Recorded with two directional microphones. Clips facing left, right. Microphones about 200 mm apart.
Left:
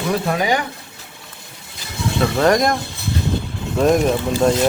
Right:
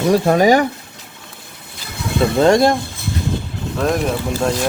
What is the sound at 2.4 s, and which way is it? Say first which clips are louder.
Speech: right 4 dB; 30° right (ahead or behind).